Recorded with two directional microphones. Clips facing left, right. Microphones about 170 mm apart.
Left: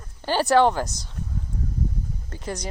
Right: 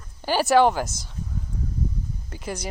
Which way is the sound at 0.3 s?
10° right (ahead or behind).